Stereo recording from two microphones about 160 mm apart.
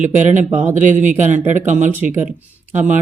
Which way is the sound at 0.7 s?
50° right (ahead or behind).